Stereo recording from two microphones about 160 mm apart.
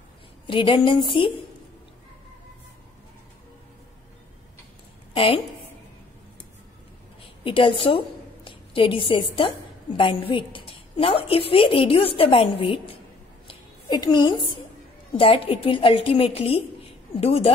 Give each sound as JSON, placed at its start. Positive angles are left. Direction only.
{"t": 0.5, "sound": "a woman's voice", "side_deg": 30}
{"t": 5.1, "sound": "a woman's voice", "side_deg": 35}
{"t": 7.4, "sound": "a woman's voice", "side_deg": 30}
{"t": 13.5, "sound": "a sound", "side_deg": 25}
{"t": 15.1, "sound": "a woman's voice", "side_deg": 35}